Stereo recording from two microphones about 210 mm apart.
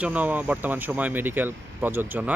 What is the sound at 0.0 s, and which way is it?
Speech, 5° right (ahead or behind).